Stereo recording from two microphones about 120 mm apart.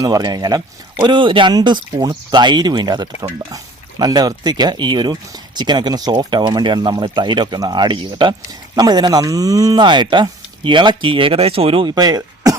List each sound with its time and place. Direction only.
0.0 s speech: 35° right (ahead or behind)